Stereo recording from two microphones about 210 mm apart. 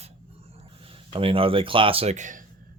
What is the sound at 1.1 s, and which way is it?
Speech, 25° right (ahead or behind).